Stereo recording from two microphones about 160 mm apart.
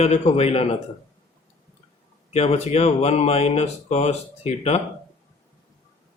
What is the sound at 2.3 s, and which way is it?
A man's voice, 40° left (ahead or behind).